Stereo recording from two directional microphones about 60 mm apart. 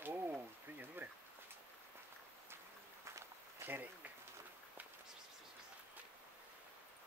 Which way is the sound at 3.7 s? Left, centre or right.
Right.